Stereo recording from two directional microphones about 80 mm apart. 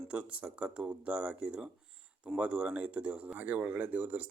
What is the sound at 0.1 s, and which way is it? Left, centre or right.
Speech, centre.